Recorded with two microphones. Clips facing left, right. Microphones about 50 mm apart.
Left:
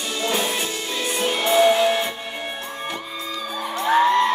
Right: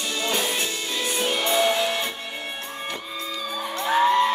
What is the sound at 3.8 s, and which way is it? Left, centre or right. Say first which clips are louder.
Music: left 3 dB; centre.